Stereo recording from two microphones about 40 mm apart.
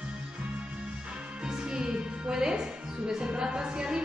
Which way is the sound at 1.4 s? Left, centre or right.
Right.